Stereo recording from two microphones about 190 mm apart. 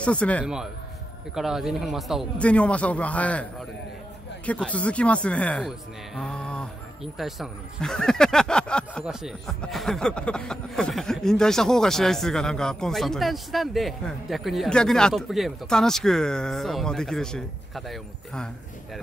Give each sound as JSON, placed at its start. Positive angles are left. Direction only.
{"t": 0.0, "sound": "speech", "side_deg": 5}